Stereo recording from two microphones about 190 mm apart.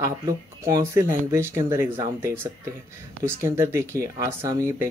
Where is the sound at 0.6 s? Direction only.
15° right (ahead or behind).